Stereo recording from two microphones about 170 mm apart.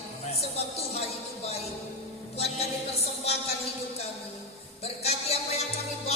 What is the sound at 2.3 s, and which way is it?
Music, 35° left (ahead or behind).